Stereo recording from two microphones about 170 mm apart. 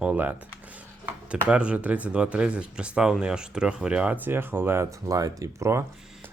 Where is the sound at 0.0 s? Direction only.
10° right (ahead or behind).